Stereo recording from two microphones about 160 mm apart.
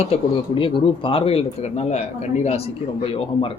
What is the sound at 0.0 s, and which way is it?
Speech, 35° left (ahead or behind).